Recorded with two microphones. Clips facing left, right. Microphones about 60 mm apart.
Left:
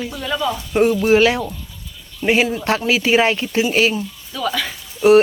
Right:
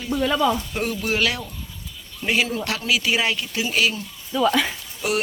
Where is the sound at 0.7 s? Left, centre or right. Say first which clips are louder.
Left 10 dB; left.